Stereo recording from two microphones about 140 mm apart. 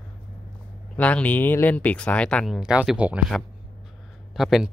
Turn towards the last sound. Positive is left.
turn(degrees=0)  # may be behind; listen again after turning